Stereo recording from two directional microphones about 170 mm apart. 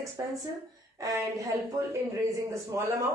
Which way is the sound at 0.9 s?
20° right (ahead or behind).